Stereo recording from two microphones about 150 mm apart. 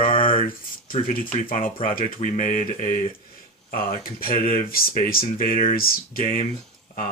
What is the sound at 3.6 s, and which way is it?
Speech, 75° left (ahead or behind).